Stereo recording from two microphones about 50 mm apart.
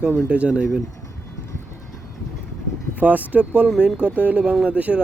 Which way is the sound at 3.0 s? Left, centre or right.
Right.